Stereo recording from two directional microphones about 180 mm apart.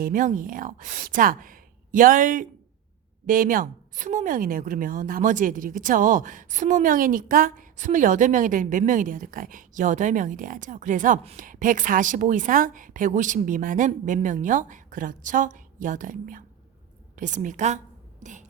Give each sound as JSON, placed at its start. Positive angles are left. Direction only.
{"t": 0.0, "sound": "a woman's voice", "side_deg": -45}
{"t": 11.2, "sound": "a woman's voice", "side_deg": -35}
{"t": 11.4, "sound": "a woman's voice", "side_deg": -45}
{"t": 18.2, "sound": "a sound", "side_deg": -45}